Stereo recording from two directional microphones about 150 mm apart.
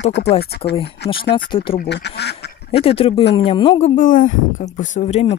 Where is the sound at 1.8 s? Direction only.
90° left.